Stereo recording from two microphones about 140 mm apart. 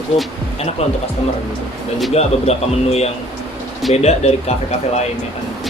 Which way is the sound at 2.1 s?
50° left (ahead or behind).